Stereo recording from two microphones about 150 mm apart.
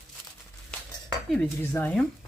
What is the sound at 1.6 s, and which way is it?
Speech, 15° left (ahead or behind).